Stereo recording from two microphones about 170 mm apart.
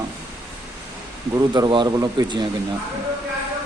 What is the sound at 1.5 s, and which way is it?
Speech, 25° right (ahead or behind).